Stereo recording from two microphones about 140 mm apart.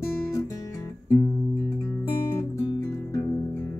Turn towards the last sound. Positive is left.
turn(degrees=20)  # may be behind; listen again after turning